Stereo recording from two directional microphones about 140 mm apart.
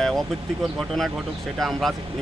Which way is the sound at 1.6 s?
Centre (ahead or behind).